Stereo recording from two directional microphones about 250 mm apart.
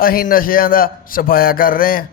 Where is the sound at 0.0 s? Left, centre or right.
Left.